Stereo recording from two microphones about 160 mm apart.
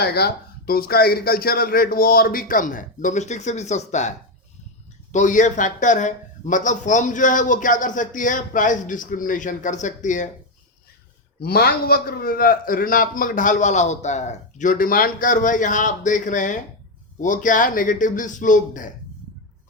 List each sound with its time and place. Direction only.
0.0 s a man's voice: 85° left; by 4.1 s 45° left (ahead or behind)
5.1 s speech: 50° left (ahead or behind)
11.3 s a man's voice: 75° left (ahead or behind); by 18.9 s 55° left (ahead or behind)